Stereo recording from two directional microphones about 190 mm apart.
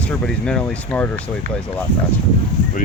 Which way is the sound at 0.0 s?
5° left (ahead or behind).